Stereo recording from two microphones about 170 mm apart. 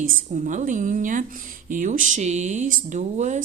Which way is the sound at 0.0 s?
50° right (ahead or behind).